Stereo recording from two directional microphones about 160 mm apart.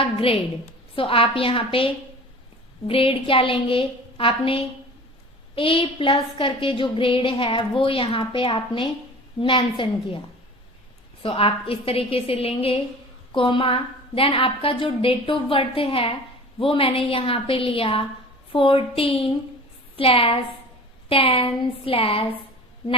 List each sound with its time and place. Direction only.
0.0 s a woman's voice: 35° left (ahead or behind)
11.2 s a woman's voice: 35° left (ahead or behind)